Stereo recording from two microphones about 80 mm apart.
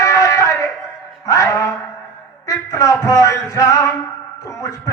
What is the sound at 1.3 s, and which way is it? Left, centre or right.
Music, left.